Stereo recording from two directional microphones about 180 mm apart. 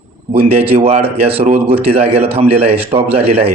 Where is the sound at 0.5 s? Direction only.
35° right (ahead or behind).